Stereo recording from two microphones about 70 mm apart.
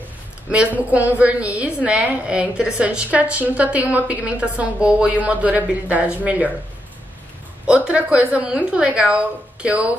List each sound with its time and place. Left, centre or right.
0.5 s a woman's voice: centre
7.6 s a woman's voice: centre